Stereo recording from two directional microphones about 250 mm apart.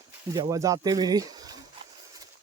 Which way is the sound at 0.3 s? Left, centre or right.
Centre.